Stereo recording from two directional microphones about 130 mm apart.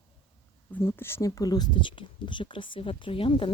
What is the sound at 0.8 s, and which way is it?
Speech, 15° left (ahead or behind).